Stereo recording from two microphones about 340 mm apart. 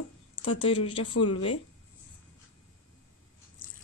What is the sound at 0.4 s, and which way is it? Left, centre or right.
Speech, left.